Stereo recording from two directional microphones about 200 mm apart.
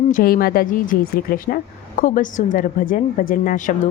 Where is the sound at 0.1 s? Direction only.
45° left (ahead or behind).